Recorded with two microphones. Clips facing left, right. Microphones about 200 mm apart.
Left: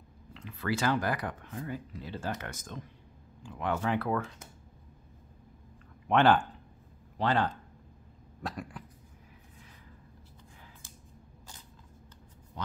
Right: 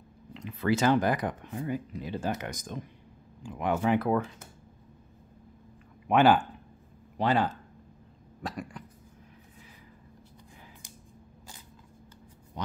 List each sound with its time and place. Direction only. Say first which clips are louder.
0.3 s speech: right 6 dB; 20° right (ahead or behind)
6.0 s speech: right 2 dB; 10° right (ahead or behind)
8.4 s cough: right 2 dB; centre (ahead or behind)
12.6 s a sound: right 3 dB; 20° right (ahead or behind)